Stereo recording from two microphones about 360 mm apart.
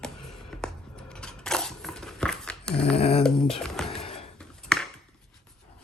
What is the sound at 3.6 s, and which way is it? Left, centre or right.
Music, centre.